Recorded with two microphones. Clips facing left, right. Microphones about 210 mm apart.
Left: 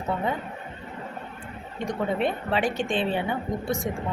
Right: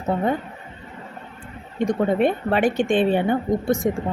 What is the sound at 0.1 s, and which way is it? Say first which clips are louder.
Speech: right 6 dB; 45° right (ahead or behind).